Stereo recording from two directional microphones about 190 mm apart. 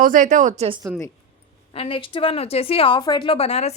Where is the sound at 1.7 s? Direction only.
30° left (ahead or behind).